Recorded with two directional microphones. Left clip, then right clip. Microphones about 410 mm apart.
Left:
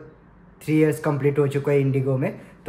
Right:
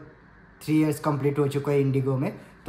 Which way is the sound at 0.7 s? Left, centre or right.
Centre.